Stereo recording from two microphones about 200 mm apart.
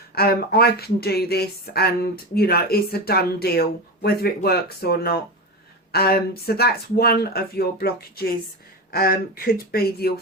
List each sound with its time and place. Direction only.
0.1 s speech: 50° left (ahead or behind)